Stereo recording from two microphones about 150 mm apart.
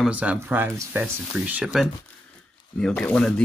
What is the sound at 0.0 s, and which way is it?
Speech, 10° right (ahead or behind).